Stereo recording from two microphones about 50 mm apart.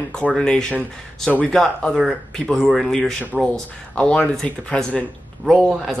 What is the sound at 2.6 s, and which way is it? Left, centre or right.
Speech, centre.